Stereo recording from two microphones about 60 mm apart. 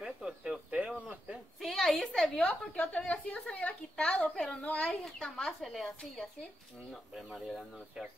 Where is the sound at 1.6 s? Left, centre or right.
Centre.